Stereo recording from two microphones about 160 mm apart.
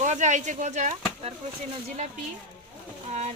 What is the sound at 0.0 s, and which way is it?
Speech, 50° right (ahead or behind).